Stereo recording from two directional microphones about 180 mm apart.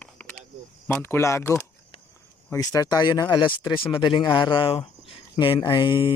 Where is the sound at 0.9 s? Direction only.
15° left (ahead or behind).